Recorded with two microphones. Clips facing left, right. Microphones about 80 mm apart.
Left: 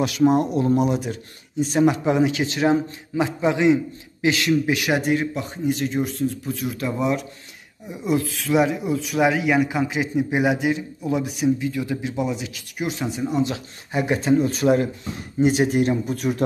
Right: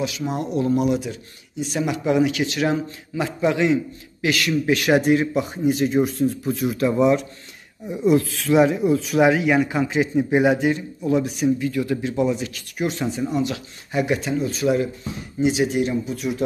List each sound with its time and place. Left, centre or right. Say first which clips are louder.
0.2 s a man's voice: left 9 dB; left
0.6 s a man's voice: even; left
4.6 s speech: right 4 dB; centre
13.3 s a man's voice: left 1 dB; left